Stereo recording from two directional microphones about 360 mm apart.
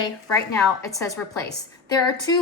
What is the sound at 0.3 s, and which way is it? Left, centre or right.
A woman's voice, centre.